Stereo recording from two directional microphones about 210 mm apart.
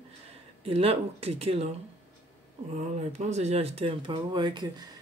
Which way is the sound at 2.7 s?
35° right (ahead or behind).